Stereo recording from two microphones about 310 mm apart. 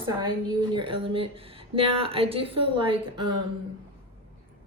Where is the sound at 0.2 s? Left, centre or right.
Centre.